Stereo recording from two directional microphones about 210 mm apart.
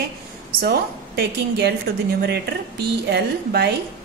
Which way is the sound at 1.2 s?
50° right (ahead or behind).